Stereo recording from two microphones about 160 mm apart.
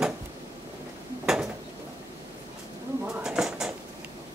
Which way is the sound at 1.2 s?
5° right (ahead or behind).